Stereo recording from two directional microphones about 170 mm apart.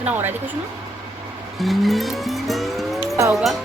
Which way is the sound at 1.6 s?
Centre (ahead or behind).